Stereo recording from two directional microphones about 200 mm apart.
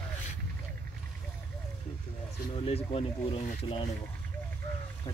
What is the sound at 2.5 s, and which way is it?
Speech, 30° left (ahead or behind).